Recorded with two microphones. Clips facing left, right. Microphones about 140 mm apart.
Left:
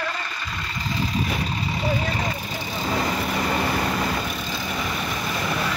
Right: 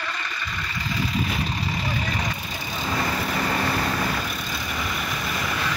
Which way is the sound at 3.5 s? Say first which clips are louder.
Left 1 dB; 15° left (ahead or behind).